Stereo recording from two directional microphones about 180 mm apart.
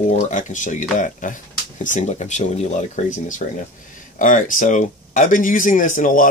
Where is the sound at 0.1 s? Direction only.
45° left (ahead or behind).